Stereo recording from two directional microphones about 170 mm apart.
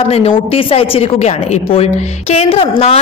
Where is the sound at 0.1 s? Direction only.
35° left (ahead or behind).